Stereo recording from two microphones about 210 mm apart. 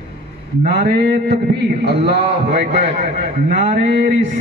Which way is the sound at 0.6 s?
50° right (ahead or behind).